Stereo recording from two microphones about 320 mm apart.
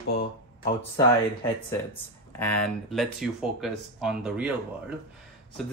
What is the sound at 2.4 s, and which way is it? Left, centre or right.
Speech, centre.